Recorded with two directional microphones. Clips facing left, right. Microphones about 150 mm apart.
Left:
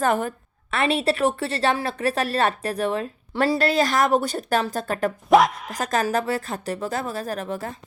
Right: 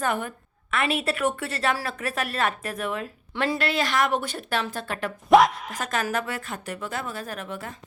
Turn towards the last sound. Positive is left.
turn(degrees=35)  # may be behind; listen again after turning